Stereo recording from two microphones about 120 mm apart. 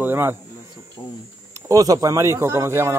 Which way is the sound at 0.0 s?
15° right (ahead or behind).